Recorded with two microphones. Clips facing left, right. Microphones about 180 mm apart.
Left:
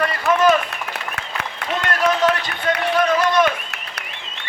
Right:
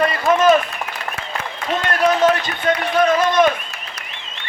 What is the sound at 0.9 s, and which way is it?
Applause, 65° left (ahead or behind).